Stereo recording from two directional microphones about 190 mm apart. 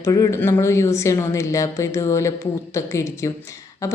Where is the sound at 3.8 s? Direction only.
15° left (ahead or behind).